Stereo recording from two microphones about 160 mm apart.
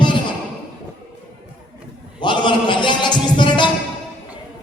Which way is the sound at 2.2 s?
30° left (ahead or behind).